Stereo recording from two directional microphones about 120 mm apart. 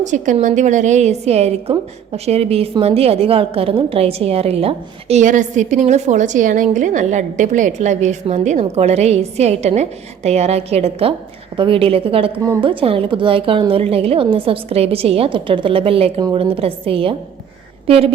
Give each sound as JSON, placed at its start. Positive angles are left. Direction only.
{"t": 0.0, "sound": "a woman's voice", "side_deg": -90}
{"t": 11.5, "sound": "a woman's voice", "side_deg": -45}